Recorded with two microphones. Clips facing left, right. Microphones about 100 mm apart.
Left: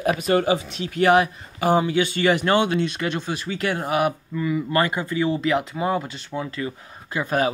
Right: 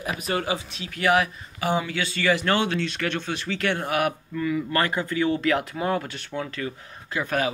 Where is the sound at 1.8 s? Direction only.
20° left (ahead or behind).